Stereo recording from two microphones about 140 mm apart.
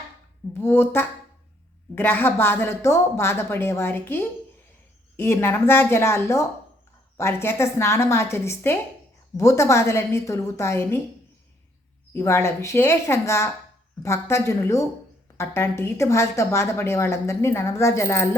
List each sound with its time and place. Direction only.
0.5 s a woman's voice: 15° left (ahead or behind)
12.1 s a woman's voice: 20° left (ahead or behind)